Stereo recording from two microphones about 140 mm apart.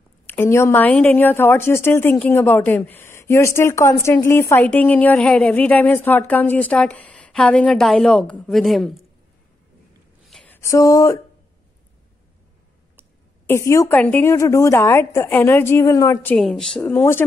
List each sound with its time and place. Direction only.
0.3 s a woman's voice: 15° left (ahead or behind); by 8.9 s centre (ahead or behind)
10.2 s a sound: centre (ahead or behind)
10.5 s speech: 20° left (ahead or behind)
13.5 s a woman's voice: 20° left (ahead or behind)
16.3 s speech: centre (ahead or behind)
16.8 s a woman's voice: 15° left (ahead or behind)